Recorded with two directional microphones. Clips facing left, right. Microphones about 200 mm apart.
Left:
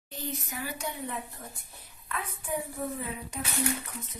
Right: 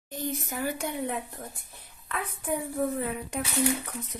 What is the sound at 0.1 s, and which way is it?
Speech, 50° right (ahead or behind).